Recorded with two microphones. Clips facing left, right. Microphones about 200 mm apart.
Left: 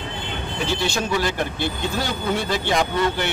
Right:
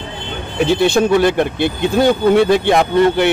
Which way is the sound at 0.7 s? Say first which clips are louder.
Right 11 dB; 55° right (ahead or behind).